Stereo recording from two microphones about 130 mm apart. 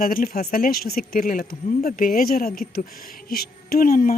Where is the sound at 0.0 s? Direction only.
90° left.